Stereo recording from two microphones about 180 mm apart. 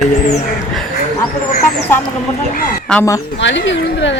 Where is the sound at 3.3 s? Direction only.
80° left.